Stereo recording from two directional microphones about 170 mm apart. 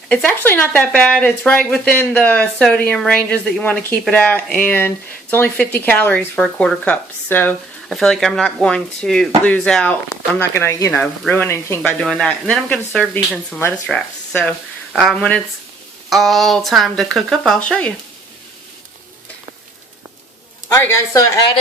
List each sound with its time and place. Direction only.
0.1 s speech: 10° left (ahead or behind)
11.8 s speech: 5° left (ahead or behind)
20.7 s speech: 15° left (ahead or behind)